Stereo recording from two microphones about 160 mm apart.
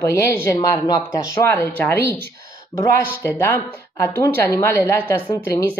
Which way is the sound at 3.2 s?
15° left (ahead or behind).